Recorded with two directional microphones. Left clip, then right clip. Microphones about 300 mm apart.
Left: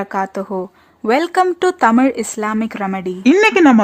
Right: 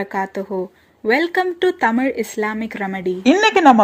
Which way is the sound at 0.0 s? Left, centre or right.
Centre.